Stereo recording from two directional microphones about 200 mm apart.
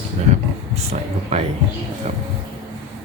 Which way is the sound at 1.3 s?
30° right (ahead or behind).